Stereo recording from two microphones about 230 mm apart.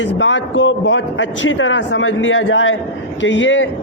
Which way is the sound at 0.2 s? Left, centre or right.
Left.